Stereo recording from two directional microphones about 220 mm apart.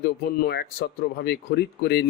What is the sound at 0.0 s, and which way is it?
Speech, 45° left (ahead or behind).